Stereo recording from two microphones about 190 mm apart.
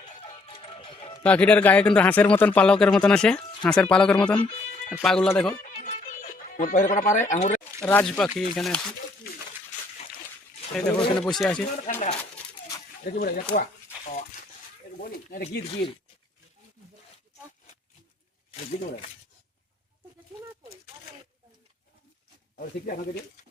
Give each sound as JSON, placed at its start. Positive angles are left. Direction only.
{"t": 0.2, "sound": "music", "side_deg": 30}
{"t": 1.2, "sound": "speech", "side_deg": 5}
{"t": 5.6, "sound": "music", "side_deg": 45}
{"t": 7.9, "sound": "speech", "side_deg": 10}
{"t": 10.8, "sound": "speech", "side_deg": 5}
{"t": 13.1, "sound": "speech", "side_deg": 50}
{"t": 15.0, "sound": "speech", "side_deg": 50}